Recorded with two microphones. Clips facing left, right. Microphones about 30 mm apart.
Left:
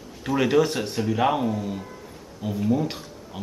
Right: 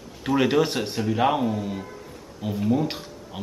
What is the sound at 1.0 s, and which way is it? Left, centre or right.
Speech, centre.